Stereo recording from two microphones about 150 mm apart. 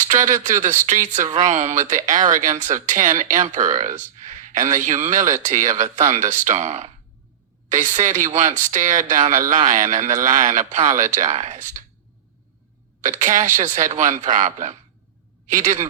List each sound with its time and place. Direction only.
0.0 s speech: 55° right (ahead or behind)
13.1 s speech: 55° right (ahead or behind)